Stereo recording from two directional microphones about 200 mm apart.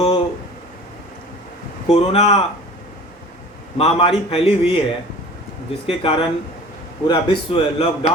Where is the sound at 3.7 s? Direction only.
30° left (ahead or behind).